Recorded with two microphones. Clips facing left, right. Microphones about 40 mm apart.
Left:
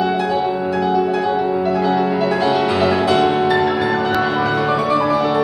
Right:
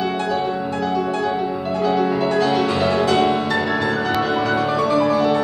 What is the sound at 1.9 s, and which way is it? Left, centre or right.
Music, centre.